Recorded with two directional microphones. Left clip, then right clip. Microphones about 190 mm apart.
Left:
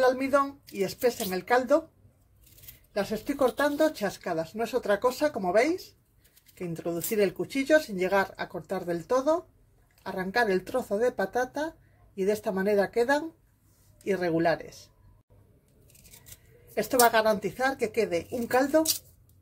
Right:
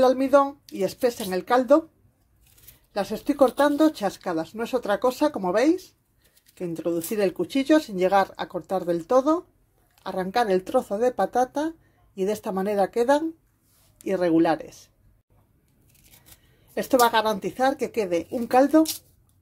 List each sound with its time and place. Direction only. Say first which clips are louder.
0.0 s speech: right 5 dB; 35° right (ahead or behind)
2.9 s speech: right 4 dB; 40° right (ahead or behind)
16.7 s speech: right 3 dB; 40° right (ahead or behind)